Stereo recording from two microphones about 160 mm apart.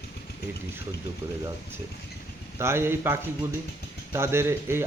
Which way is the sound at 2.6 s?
15° right (ahead or behind).